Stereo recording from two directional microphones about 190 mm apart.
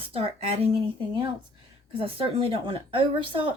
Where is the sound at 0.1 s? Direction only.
30° right (ahead or behind).